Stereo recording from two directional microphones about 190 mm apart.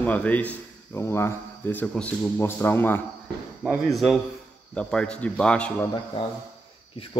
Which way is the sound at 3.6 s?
Centre (ahead or behind).